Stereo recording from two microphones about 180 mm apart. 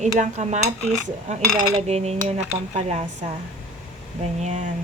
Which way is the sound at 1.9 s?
35° right (ahead or behind).